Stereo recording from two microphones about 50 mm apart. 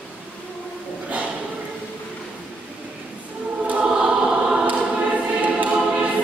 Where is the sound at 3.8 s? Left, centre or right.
Centre.